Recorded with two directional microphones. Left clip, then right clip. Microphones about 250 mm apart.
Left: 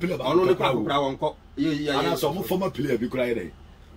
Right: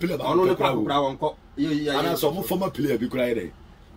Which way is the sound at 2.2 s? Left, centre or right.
Right.